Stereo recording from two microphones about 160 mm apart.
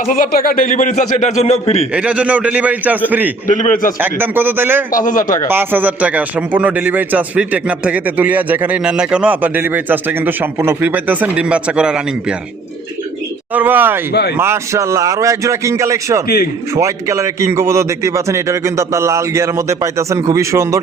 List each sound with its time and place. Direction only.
0.0 s a man's voice: 60° left (ahead or behind); by 1.9 s 40° left (ahead or behind)
1.9 s speech: 10° right (ahead or behind)
3.4 s a man's voice: 55° left (ahead or behind)
4.0 s speech: 10° right (ahead or behind)
4.9 s a man's voice: 55° left (ahead or behind)
5.5 s speech: 10° right (ahead or behind)
13.5 s speech: 10° right (ahead or behind)
14.1 s speech: 85° left
14.3 s speech: 15° right (ahead or behind)